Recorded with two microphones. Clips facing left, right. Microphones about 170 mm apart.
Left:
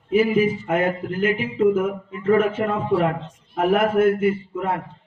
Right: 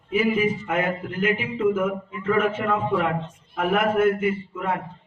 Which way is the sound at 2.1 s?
40° left (ahead or behind).